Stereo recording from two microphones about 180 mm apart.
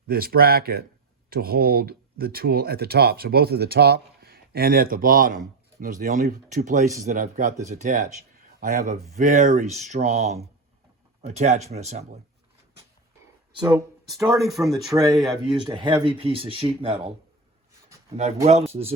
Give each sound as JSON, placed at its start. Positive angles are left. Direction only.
{"t": 0.1, "sound": "speech", "side_deg": -55}
{"t": 13.5, "sound": "speech", "side_deg": -25}
{"t": 14.4, "sound": "speech", "side_deg": 0}
{"t": 15.4, "sound": "speech", "side_deg": -25}
{"t": 18.4, "sound": "speech", "side_deg": -35}